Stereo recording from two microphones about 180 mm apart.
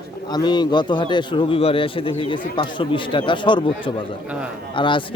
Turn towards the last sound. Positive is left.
turn(degrees=25)  # may be behind; listen again after turning